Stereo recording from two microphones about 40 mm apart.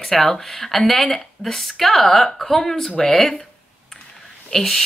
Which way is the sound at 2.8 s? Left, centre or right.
Centre.